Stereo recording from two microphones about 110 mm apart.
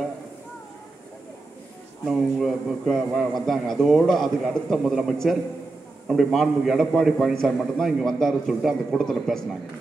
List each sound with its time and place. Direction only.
2.0 s a man's voice: centre (ahead or behind)